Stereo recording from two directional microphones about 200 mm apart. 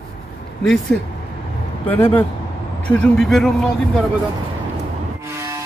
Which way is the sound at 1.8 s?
10° left (ahead or behind).